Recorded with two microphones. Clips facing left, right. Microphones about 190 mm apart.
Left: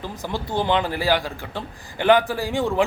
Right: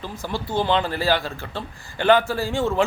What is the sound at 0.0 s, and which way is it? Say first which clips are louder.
Speech: even; 20° left (ahead or behind).